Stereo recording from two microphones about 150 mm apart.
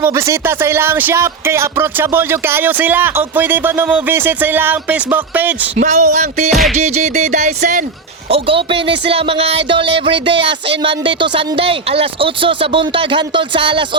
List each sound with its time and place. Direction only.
0.0 s speech: 20° right (ahead or behind)
5.8 s music: 50° right (ahead or behind)
6.5 s music: centre (ahead or behind)
6.7 s music: 50° right (ahead or behind)
8.3 s music: 35° right (ahead or behind)